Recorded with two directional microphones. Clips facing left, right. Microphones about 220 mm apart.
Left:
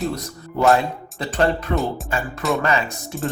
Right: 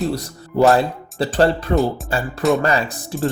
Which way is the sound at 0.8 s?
35° right (ahead or behind).